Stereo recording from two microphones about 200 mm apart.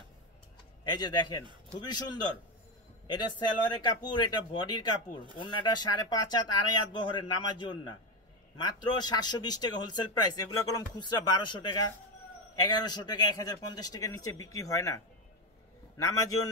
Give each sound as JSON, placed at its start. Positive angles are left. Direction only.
{"t": 0.8, "sound": "speech", "side_deg": 20}
{"t": 3.6, "sound": "speech", "side_deg": 25}
{"t": 16.0, "sound": "a man's voice", "side_deg": 15}